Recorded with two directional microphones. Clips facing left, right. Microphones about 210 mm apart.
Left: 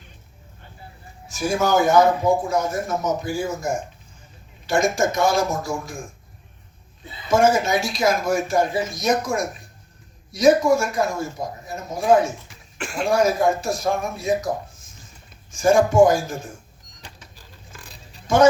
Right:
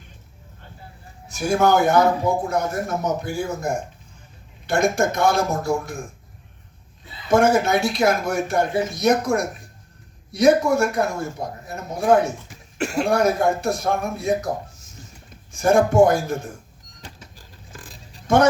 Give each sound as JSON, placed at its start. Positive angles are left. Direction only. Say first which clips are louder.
{"t": 1.3, "sound": "speech", "louder": "right 2 dB", "side_deg": -60}
{"t": 7.3, "sound": "speech", "louder": "right 1 dB", "side_deg": -60}
{"t": 12.8, "sound": "throat clearing", "louder": "right 5 dB", "side_deg": -40}
{"t": 13.1, "sound": "speech", "louder": "left 1 dB", "side_deg": -60}
{"t": 15.5, "sound": "speech", "louder": "even", "side_deg": -60}
{"t": 17.0, "sound": "a sound", "louder": "right 3 dB", "side_deg": -45}